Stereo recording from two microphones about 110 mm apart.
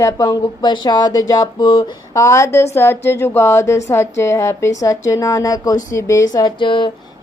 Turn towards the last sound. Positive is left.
turn(degrees=45)  # may be behind; listen again after turning